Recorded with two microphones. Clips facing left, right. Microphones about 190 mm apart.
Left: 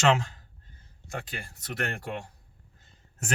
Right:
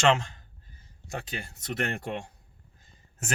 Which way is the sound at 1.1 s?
20° right (ahead or behind).